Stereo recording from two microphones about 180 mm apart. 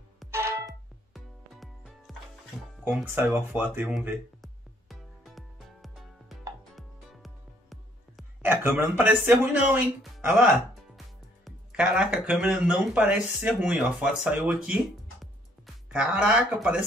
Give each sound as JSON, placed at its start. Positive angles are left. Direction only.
{"t": 0.3, "sound": "music", "side_deg": -15}
{"t": 0.7, "sound": "music", "side_deg": 0}
{"t": 3.0, "sound": "speech", "side_deg": -10}
{"t": 4.4, "sound": "music", "side_deg": 0}
{"t": 8.4, "sound": "speech", "side_deg": -10}